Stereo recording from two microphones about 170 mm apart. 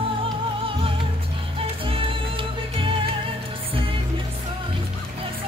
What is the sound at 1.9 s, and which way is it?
Music, 30° right (ahead or behind).